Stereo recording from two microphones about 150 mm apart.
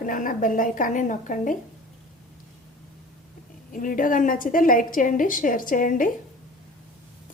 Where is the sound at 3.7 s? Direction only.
65° left (ahead or behind).